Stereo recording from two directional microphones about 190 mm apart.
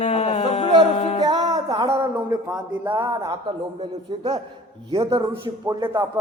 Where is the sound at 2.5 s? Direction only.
10° right (ahead or behind).